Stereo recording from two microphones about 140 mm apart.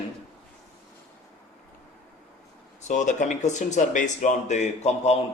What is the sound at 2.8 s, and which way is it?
Speech, 60° left (ahead or behind).